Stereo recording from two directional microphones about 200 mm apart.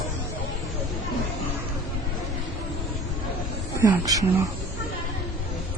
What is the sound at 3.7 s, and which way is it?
Speech, 15° right (ahead or behind).